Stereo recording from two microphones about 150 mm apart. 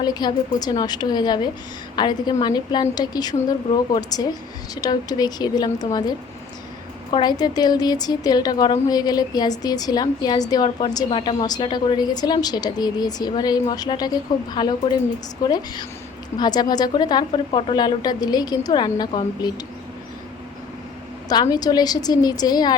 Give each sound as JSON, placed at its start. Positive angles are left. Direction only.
{"t": 0.0, "sound": "a woman's voice", "side_deg": 30}
{"t": 21.2, "sound": "a woman's voice", "side_deg": 25}